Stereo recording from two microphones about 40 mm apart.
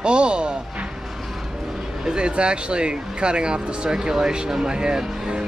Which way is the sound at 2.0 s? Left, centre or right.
Right.